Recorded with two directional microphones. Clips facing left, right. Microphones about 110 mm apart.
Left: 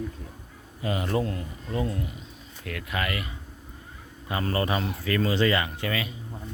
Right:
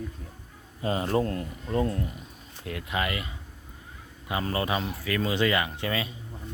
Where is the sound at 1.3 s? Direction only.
45° right (ahead or behind).